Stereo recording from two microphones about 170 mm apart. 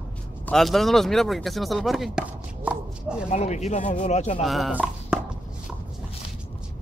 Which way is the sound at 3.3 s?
45° left (ahead or behind).